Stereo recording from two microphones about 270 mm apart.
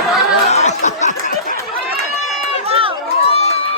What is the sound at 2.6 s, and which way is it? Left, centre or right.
Run, right.